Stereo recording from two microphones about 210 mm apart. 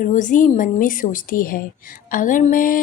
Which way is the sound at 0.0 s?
35° left (ahead or behind).